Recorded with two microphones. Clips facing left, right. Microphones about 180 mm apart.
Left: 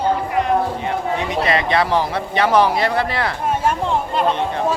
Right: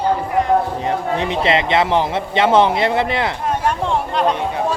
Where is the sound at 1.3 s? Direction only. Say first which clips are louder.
Right 2 dB; 25° right (ahead or behind).